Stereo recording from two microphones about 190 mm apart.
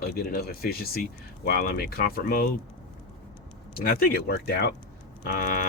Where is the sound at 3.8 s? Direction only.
50° left (ahead or behind).